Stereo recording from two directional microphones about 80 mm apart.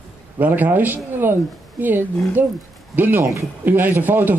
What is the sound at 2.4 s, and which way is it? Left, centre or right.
A man's voice, right.